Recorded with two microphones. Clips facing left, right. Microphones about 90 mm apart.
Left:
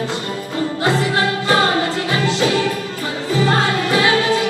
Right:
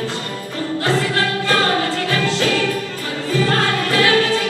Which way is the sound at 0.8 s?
20° left (ahead or behind).